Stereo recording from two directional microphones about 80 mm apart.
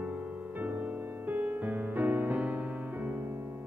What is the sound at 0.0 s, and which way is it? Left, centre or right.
Music, centre.